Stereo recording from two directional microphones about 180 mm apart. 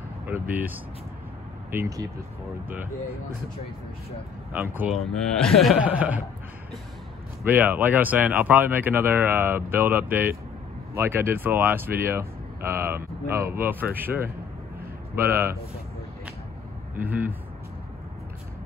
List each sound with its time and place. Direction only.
0.3 s speech: 10° right (ahead or behind)
4.5 s speech: 10° right (ahead or behind)
7.4 s speech: 10° right (ahead or behind)
15.2 s speech: 15° right (ahead or behind)
16.9 s speech: 10° right (ahead or behind)